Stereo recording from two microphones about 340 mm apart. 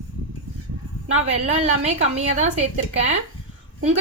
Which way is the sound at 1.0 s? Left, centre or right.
Centre.